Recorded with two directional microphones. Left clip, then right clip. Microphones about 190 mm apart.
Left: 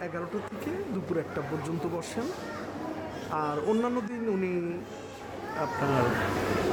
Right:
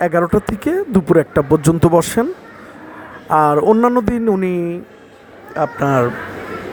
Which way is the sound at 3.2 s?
45° right (ahead or behind).